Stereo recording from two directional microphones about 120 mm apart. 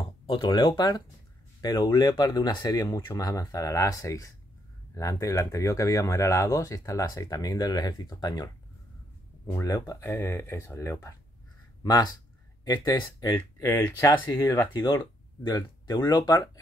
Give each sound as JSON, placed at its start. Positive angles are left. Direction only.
{"t": 0.3, "sound": "speech", "side_deg": 40}
{"t": 9.5, "sound": "speech", "side_deg": 30}
{"t": 13.7, "sound": "speech", "side_deg": 15}